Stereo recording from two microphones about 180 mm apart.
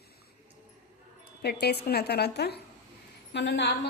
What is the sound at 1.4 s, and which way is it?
A woman's voice, 65° left (ahead or behind).